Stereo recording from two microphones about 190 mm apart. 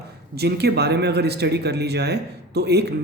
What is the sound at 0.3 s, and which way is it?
Speech, 60° right (ahead or behind).